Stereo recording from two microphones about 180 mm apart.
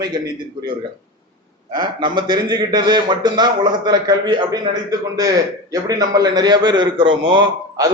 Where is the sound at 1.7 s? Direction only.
25° right (ahead or behind).